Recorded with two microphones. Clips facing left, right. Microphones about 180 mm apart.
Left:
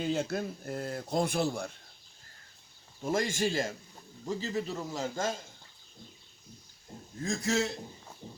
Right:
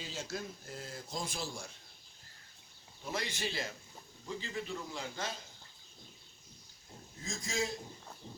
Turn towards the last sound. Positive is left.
turn(degrees=70)  # may be behind; listen again after turning